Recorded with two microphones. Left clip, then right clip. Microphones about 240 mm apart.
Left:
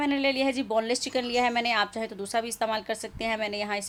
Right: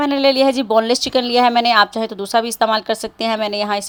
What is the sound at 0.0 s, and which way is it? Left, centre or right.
Speech, right.